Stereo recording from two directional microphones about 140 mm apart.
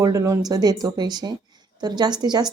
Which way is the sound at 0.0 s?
25° right (ahead or behind).